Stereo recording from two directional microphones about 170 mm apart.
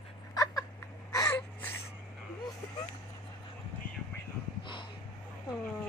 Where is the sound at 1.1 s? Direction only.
20° left (ahead or behind).